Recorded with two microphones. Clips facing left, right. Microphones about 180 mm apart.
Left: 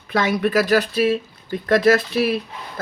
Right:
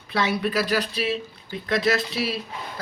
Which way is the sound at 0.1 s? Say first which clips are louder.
Left 5 dB; 50° left (ahead or behind).